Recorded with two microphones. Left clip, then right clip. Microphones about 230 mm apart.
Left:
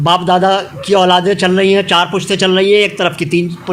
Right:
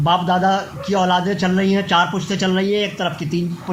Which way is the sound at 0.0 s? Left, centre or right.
Left.